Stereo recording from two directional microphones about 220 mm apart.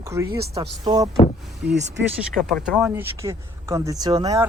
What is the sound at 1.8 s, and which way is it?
Speech, 30° right (ahead or behind).